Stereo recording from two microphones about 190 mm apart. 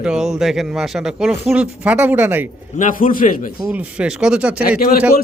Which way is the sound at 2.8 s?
45° left (ahead or behind).